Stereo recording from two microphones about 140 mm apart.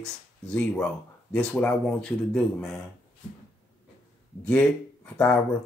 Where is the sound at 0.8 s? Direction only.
5° left (ahead or behind).